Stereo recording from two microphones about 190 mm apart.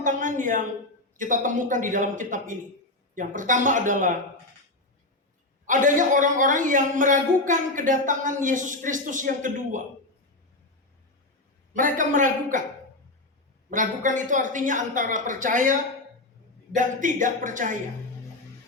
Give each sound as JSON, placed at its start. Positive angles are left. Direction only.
{"t": 0.0, "sound": "a sound", "side_deg": -40}
{"t": 1.1, "sound": "a man's voice", "side_deg": -45}
{"t": 5.6, "sound": "a man's voice", "side_deg": -40}
{"t": 11.8, "sound": "a man's voice", "side_deg": -45}
{"t": 13.7, "sound": "a man's voice", "side_deg": -45}